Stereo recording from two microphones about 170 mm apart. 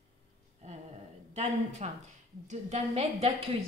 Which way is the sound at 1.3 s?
40° right (ahead or behind).